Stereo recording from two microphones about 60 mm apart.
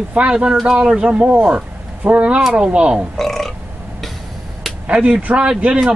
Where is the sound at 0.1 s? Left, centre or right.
Centre.